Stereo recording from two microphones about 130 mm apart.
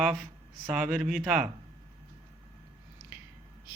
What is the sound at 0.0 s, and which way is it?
Speech, 5° right (ahead or behind).